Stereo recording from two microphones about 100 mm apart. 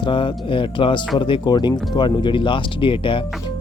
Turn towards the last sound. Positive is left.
turn(degrees=60)  # may be behind; listen again after turning